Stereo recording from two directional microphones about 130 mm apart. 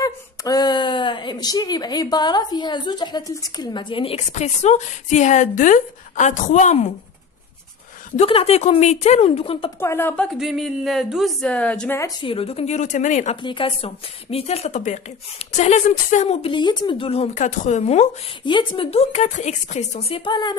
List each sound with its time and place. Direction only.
0.0 s a woman's voice: 30° left (ahead or behind)
4.3 s speech: 60° left (ahead or behind)
8.2 s speech: 50° left (ahead or behind)
9.8 s a woman's voice: 20° left (ahead or behind)
10.3 s a woman's voice: 5° right (ahead or behind)
12.2 s a woman's voice: 45° left (ahead or behind); by 13.4 s 70° left (ahead or behind)
13.4 s a woman's voice: 40° left (ahead or behind); by 16.3 s 65° left (ahead or behind)
16.4 s speech: 40° left (ahead or behind); by 18.1 s 60° left (ahead or behind)
18.4 s speech: 40° left (ahead or behind)
20.2 s a woman's voice: 35° left (ahead or behind)